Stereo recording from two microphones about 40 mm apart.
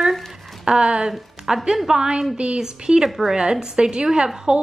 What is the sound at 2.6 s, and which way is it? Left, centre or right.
Speech, centre.